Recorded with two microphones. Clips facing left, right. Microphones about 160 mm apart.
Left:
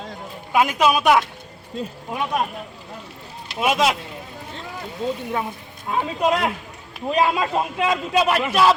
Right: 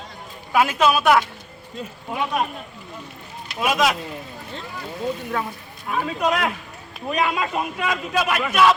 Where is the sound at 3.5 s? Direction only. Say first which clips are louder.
Left 1 dB; 25° left (ahead or behind).